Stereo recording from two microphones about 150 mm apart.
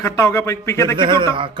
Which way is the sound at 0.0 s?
20° left (ahead or behind).